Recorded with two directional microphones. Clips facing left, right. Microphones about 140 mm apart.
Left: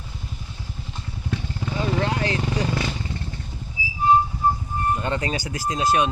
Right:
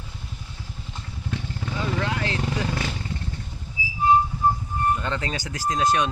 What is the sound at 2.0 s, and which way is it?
Vehicle, 35° left (ahead or behind).